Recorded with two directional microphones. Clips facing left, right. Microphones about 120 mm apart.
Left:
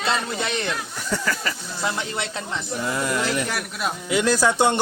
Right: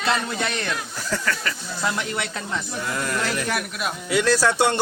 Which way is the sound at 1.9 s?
30° left (ahead or behind).